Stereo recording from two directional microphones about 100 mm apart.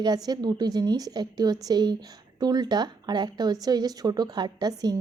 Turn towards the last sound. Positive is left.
turn(degrees=-45)  # may be behind; listen again after turning